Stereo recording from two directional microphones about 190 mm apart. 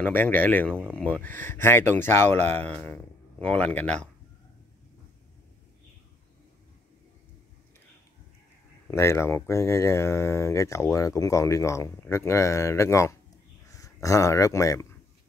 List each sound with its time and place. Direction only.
0.0 s speech: 10° left (ahead or behind)
8.8 s speech: 15° left (ahead or behind)